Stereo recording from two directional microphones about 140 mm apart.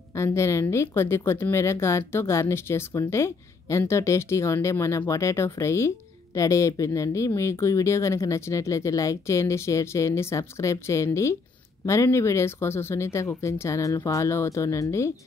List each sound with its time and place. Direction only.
0.1 s speech: 20° left (ahead or behind)